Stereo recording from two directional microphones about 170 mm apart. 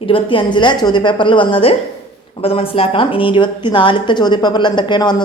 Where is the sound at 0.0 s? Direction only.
30° left (ahead or behind).